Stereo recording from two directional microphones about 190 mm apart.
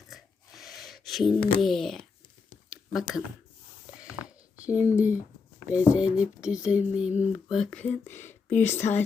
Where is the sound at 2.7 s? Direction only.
Centre (ahead or behind).